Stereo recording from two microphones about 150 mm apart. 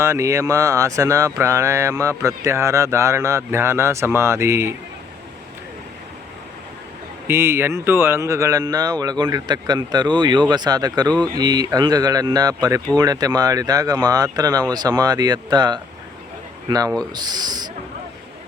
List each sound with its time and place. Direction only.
0.0 s speech: 20° right (ahead or behind)
7.3 s speech: 15° right (ahead or behind)